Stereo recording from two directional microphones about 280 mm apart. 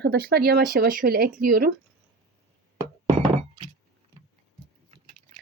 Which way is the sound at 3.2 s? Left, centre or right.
Centre.